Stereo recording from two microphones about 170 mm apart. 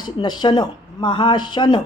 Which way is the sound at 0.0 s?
25° left (ahead or behind).